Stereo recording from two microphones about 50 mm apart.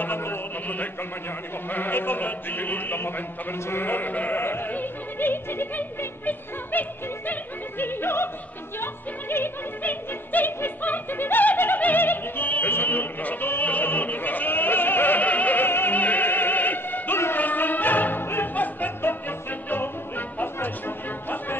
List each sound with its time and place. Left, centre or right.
0.0 s a sound: left
1.7 s music: left
4.4 s music: left
5.8 s music: left
7.8 s music: left
11.8 s opera: left
17.4 s music: left
18.5 s music: left